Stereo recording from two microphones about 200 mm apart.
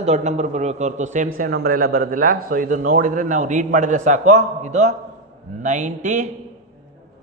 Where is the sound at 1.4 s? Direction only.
50° right (ahead or behind).